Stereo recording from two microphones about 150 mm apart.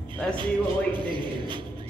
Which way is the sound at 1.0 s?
30° right (ahead or behind).